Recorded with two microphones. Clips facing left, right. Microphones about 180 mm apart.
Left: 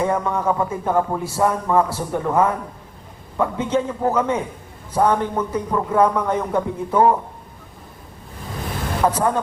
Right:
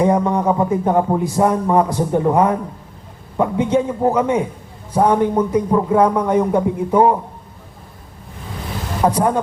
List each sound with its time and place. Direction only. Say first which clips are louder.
0.0 s speech: right 5 dB; 15° right (ahead or behind)
9.0 s speech: right 3 dB; 15° right (ahead or behind)